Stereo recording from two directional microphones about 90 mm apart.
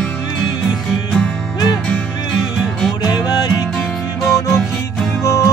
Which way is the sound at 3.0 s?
50° left (ahead or behind).